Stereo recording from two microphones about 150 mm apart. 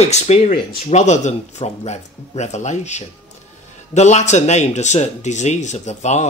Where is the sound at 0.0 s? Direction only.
50° left (ahead or behind).